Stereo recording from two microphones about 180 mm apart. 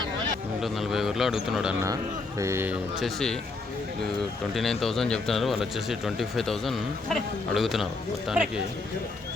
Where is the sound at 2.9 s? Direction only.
Centre (ahead or behind).